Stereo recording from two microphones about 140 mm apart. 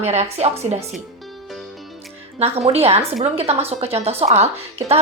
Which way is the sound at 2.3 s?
50° right (ahead or behind).